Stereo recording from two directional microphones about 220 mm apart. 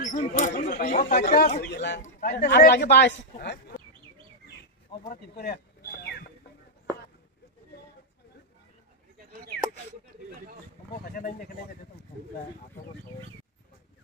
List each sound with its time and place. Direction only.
0.0 s speech: 35° left (ahead or behind)
5.0 s bird: 45° left (ahead or behind)
10.9 s speech: 40° left (ahead or behind)